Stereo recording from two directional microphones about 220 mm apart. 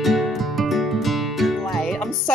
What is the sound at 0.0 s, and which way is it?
Music, centre (ahead or behind).